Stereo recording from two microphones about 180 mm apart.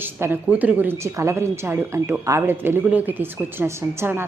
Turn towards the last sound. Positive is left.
turn(degrees=-15)  # may be behind; listen again after turning